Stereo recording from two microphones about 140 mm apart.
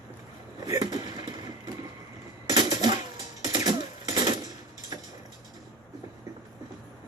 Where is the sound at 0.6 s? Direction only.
30° right (ahead or behind).